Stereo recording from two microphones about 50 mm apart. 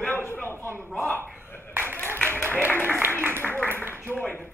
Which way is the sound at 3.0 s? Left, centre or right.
Right.